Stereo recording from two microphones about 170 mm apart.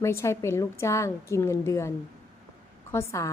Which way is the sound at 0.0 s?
15° left (ahead or behind).